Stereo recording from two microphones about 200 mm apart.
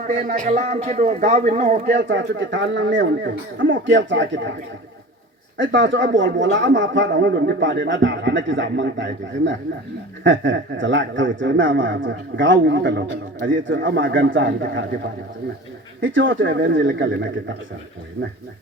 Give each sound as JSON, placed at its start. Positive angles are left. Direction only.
{"t": 0.1, "sound": "a man's voice", "side_deg": -45}
{"t": 1.9, "sound": "a man's voice", "side_deg": -60}
{"t": 5.5, "sound": "a man's voice", "side_deg": -65}
{"t": 16.0, "sound": "a man's voice", "side_deg": -70}